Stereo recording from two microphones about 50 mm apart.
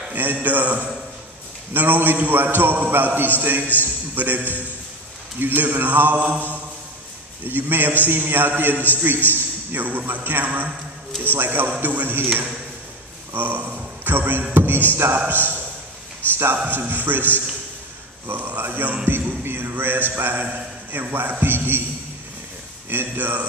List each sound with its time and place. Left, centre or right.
0.1 s a man's voice: right
7.4 s a man's voice: right
13.3 s a man's voice: right
18.6 s a man's voice: right
19.0 s music: right
19.7 s a man's voice: right
22.8 s a man's voice: right